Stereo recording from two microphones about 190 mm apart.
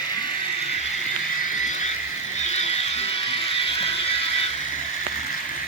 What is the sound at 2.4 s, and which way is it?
Music, 35° left (ahead or behind).